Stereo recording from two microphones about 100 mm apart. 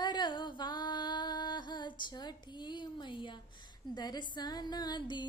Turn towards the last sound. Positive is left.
turn(degrees=45)  # may be behind; listen again after turning